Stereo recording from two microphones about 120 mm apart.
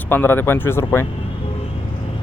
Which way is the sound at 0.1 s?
15° left (ahead or behind).